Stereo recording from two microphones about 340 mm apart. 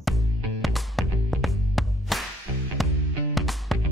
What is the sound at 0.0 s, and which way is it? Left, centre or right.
Music, centre.